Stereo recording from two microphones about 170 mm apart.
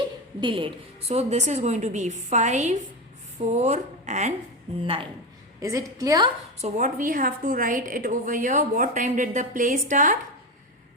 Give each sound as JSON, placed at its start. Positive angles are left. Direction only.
{"t": 0.3, "sound": "a woman's voice", "side_deg": -30}
{"t": 5.5, "sound": "a woman's voice", "side_deg": -20}
{"t": 6.6, "sound": "a woman's voice", "side_deg": -50}